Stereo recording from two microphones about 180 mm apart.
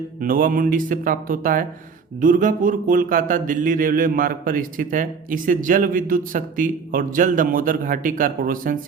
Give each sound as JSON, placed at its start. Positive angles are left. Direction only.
{"t": 0.2, "sound": "speech", "side_deg": -50}